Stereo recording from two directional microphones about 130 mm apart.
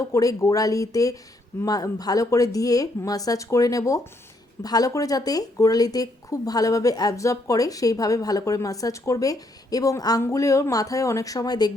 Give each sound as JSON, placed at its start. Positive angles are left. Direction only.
{"t": 0.0, "sound": "speech", "side_deg": 25}